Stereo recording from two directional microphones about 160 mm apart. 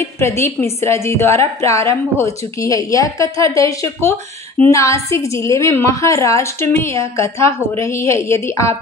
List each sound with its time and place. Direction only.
0.2 s a woman's voice: 15° left (ahead or behind)